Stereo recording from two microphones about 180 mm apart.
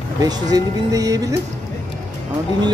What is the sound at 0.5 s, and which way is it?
Speech, 20° right (ahead or behind).